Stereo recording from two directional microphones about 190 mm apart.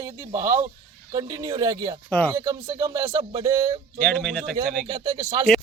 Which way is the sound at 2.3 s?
15° right (ahead or behind).